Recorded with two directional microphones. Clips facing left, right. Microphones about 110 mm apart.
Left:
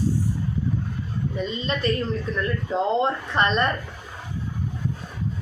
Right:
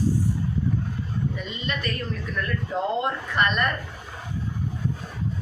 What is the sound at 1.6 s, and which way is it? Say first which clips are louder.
A woman's voice: left 4 dB; 30° left (ahead or behind).